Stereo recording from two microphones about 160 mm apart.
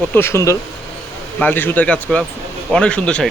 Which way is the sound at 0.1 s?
15° left (ahead or behind).